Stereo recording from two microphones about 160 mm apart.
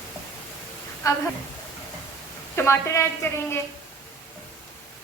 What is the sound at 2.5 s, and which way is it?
A woman's voice, 15° left (ahead or behind).